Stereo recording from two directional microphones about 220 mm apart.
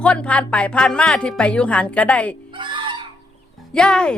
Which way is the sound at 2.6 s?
20° right (ahead or behind).